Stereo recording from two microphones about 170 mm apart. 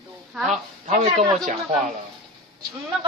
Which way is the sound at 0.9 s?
45° right (ahead or behind).